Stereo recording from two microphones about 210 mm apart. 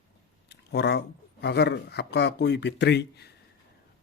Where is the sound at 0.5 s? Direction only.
55° left (ahead or behind).